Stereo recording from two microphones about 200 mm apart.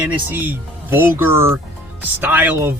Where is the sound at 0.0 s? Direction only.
10° right (ahead or behind).